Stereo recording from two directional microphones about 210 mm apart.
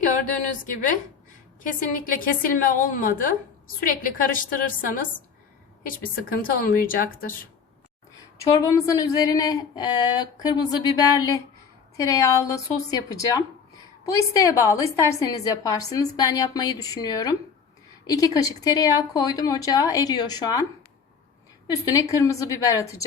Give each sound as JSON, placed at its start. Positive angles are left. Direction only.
{"t": 0.1, "sound": "a woman's voice", "side_deg": 35}
{"t": 2.1, "sound": "a woman's voice", "side_deg": 40}
{"t": 6.4, "sound": "a woman's voice", "side_deg": 45}
{"t": 8.4, "sound": "a woman's voice", "side_deg": 15}
{"t": 21.7, "sound": "a woman's voice", "side_deg": 15}